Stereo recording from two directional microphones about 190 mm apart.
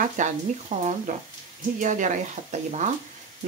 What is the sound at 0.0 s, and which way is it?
Speech, 40° right (ahead or behind).